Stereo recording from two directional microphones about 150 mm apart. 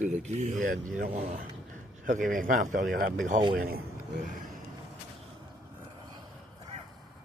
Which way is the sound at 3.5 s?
80° right.